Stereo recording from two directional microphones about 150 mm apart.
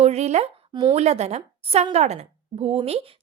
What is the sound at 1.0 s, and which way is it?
A woman's voice, 45° right (ahead or behind).